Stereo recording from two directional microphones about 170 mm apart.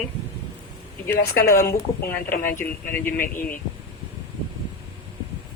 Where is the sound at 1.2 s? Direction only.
60° left (ahead or behind).